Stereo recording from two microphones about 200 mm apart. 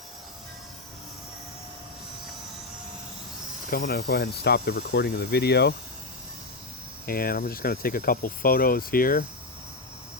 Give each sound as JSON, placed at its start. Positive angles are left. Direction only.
{"t": 3.7, "sound": "speech", "side_deg": 50}
{"t": 7.0, "sound": "speech", "side_deg": 45}